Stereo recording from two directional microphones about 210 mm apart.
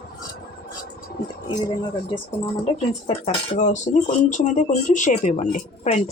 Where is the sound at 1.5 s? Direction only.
20° left (ahead or behind).